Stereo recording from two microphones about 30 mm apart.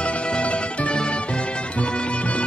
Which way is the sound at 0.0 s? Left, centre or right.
Left.